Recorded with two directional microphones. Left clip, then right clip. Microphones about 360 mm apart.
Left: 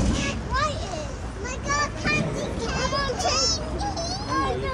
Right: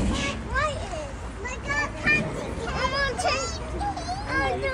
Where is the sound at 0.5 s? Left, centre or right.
Right.